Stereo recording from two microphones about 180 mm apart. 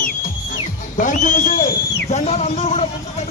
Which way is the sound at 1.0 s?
45° left (ahead or behind).